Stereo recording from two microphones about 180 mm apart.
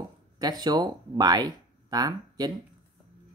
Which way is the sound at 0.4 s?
20° right (ahead or behind).